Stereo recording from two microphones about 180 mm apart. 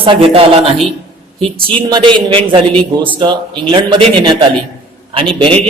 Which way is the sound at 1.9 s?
30° right (ahead or behind).